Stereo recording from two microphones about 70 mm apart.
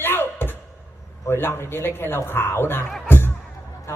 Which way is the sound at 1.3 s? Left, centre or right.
Left.